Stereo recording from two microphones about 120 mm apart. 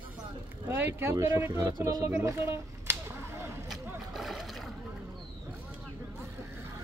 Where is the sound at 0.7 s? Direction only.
20° right (ahead or behind).